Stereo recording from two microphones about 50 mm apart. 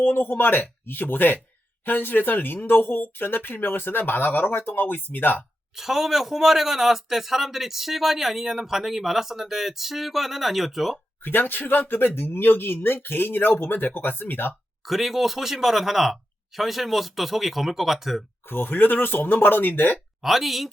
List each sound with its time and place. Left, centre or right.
0.0 s speech: left
5.7 s a man's voice: centre
11.2 s speech: left
14.8 s a man's voice: centre
18.4 s speech: left
20.2 s a man's voice: centre